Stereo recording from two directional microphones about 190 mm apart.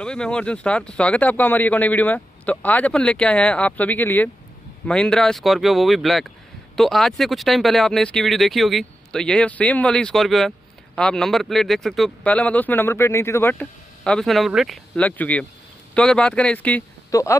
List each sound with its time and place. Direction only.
0.0 s speech: 5° left (ahead or behind)